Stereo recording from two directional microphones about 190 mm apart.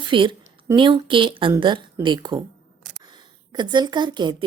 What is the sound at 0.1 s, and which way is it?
A woman's voice, 25° right (ahead or behind).